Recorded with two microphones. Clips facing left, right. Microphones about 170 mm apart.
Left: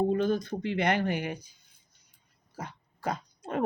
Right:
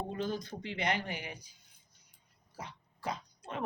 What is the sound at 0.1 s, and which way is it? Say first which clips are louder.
Speech: left 9 dB; 55° left (ahead or behind).